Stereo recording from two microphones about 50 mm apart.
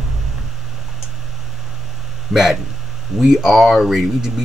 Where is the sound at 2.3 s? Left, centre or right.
Centre.